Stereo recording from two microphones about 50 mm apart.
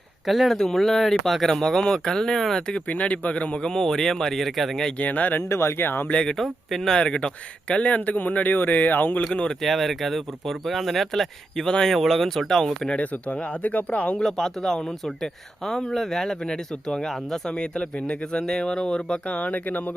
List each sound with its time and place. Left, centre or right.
0.3 s speech: centre
2.9 s speech: left; by 4.9 s centre
4.9 s speech: left
5.4 s speech: left
5.8 s speech: left
6.1 s speech: left
6.3 s speech: centre
6.9 s speech: centre; by 9.2 s left
9.5 s speech: centre
12.9 s speech: left
14.2 s speech: centre; by 19.8 s left